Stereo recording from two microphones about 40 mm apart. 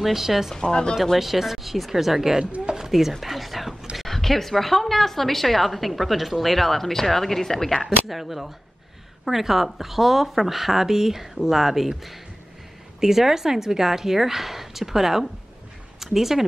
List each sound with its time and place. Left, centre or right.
0.0 s a woman's voice: centre
0.6 s speech: centre
1.1 s a woman's voice: centre
2.6 s a sound: centre
2.9 s whispering: centre
3.9 s a woman's voice: centre
8.1 s a woman's voice: centre